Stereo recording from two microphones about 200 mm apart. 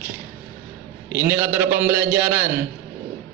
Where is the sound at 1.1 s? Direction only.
10° right (ahead or behind).